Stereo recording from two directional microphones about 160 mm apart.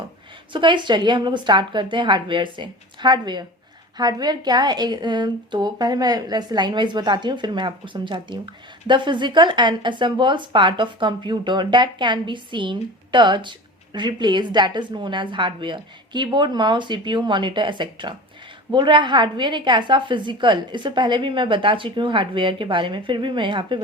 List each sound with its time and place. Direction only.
0.5 s a woman's voice: 30° right (ahead or behind)